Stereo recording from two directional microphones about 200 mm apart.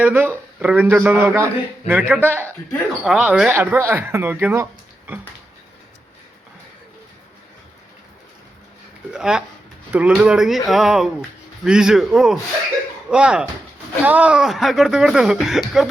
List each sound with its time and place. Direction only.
0.0 s speech: 10° right (ahead or behind)
9.1 s speech: 5° right (ahead or behind)